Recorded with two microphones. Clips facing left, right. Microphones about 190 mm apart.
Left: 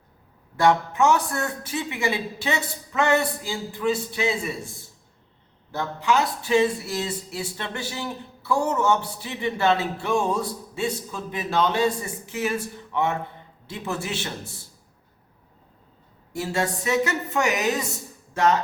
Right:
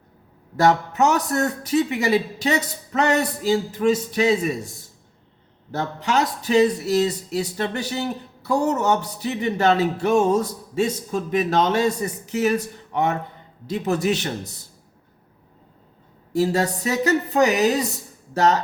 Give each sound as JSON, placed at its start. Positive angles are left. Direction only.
{"t": 0.6, "sound": "speech", "side_deg": -40}
{"t": 5.7, "sound": "speech", "side_deg": -40}
{"t": 16.3, "sound": "speech", "side_deg": -35}